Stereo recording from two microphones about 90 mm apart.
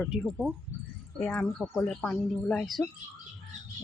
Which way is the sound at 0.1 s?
5° right (ahead or behind).